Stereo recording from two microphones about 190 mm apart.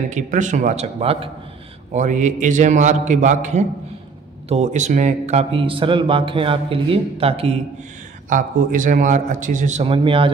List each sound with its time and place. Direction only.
0.1 s a man's voice: 40° right (ahead or behind)
8.3 s a man's voice: 45° right (ahead or behind); by 10.3 s 25° right (ahead or behind)